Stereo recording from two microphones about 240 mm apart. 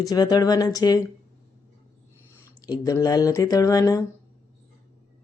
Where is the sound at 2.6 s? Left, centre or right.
Centre.